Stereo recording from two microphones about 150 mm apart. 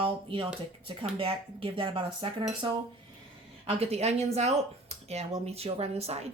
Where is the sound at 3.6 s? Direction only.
45° right (ahead or behind).